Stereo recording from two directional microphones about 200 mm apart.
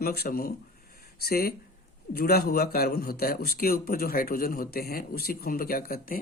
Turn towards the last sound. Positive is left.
turn(degrees=45)  # may be behind; listen again after turning